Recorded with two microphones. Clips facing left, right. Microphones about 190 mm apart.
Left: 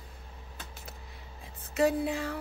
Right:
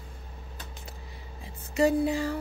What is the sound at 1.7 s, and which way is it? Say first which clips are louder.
Speech: right 3 dB; centre (ahead or behind).